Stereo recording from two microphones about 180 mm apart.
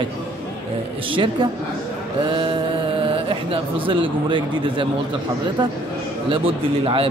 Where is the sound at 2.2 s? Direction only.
30° right (ahead or behind).